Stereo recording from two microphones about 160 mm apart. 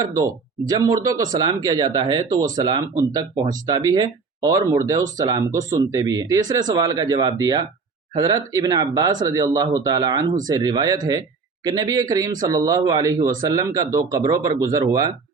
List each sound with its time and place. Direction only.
0.7 s speech: 25° right (ahead or behind)